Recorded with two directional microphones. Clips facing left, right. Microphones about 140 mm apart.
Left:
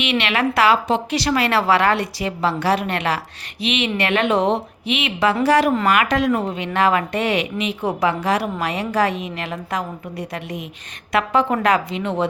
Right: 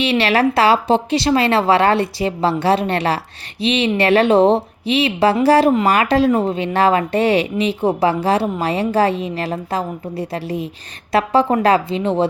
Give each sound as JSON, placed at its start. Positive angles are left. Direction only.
{"t": 0.0, "sound": "speech", "side_deg": -35}